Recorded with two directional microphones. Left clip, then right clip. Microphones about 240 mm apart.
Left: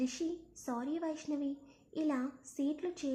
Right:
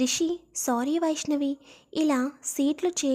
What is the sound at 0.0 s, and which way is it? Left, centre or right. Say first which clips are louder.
A woman's voice: right 11 dB; right.